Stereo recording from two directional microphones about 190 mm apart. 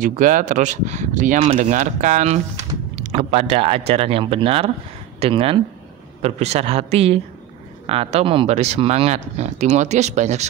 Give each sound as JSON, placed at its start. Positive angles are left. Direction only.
{"t": 0.0, "sound": "speech", "side_deg": -45}